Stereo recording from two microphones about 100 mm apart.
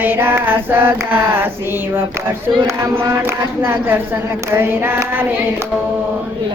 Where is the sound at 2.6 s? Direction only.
30° right (ahead or behind).